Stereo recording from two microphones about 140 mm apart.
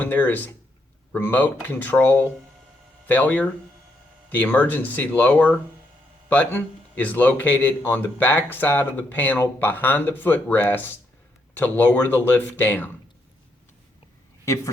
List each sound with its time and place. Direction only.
0.0 s speech: 10° left (ahead or behind)
14.4 s a man's voice: 20° left (ahead or behind)